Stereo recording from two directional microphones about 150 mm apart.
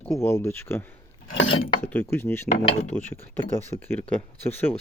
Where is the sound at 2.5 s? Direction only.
45° left (ahead or behind).